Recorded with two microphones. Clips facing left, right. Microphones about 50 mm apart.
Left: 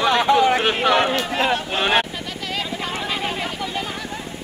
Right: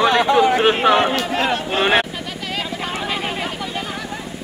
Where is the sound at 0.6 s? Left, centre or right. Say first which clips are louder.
Right 3 dB; centre.